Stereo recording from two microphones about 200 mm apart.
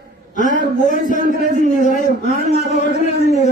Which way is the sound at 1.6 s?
40° left (ahead or behind).